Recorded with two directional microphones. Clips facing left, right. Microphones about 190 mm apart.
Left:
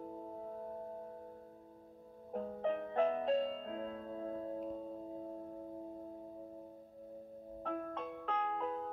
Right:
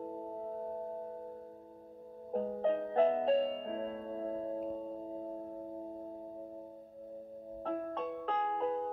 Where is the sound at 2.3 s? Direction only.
30° right (ahead or behind).